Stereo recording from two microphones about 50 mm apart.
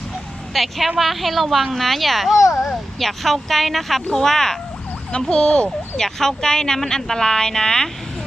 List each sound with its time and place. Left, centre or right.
0.5 s a woman's voice: centre
2.4 s a child's voice: left
3.0 s a woman's voice: centre